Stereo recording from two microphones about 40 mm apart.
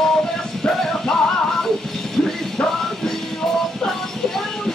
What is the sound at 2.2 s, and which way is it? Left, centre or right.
Music, left.